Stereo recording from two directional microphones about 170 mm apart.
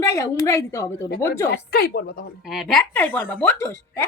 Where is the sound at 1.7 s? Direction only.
65° left (ahead or behind).